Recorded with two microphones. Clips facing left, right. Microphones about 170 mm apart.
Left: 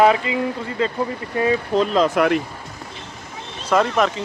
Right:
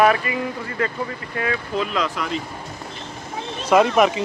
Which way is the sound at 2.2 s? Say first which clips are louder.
Left 9 dB; 60° left (ahead or behind).